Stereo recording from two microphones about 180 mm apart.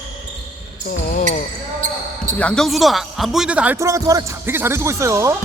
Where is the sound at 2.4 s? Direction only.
5° left (ahead or behind); by 5.3 s 15° right (ahead or behind).